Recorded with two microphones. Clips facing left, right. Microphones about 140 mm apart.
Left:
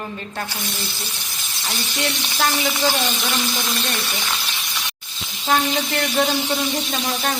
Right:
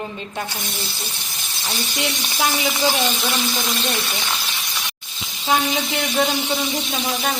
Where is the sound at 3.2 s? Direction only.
Centre (ahead or behind).